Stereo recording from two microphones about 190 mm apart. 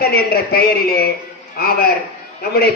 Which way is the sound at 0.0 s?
55° left (ahead or behind).